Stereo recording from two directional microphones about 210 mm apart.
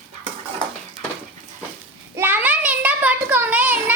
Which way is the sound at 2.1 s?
10° right (ahead or behind).